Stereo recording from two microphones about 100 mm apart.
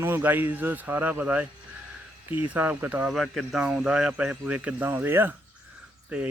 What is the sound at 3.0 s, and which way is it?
Speech, centre (ahead or behind).